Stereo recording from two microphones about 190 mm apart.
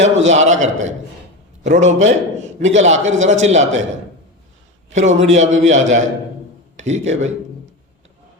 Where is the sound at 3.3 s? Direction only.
35° right (ahead or behind).